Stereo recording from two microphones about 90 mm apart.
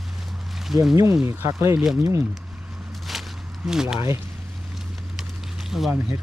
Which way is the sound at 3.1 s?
Centre (ahead or behind).